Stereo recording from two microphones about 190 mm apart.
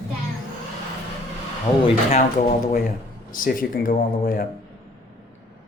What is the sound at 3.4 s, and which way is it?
Speech, 50° left (ahead or behind).